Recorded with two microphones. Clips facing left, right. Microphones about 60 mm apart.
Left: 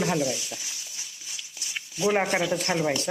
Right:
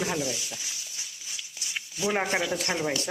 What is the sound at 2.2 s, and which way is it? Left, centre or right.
Speech, centre.